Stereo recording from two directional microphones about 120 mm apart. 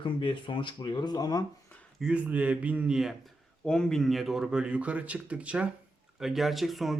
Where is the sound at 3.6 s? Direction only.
5° left (ahead or behind).